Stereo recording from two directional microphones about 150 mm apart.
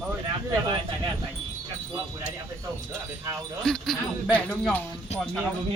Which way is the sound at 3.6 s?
5° left (ahead or behind).